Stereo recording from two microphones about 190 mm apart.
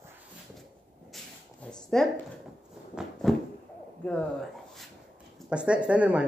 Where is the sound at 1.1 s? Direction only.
5° left (ahead or behind).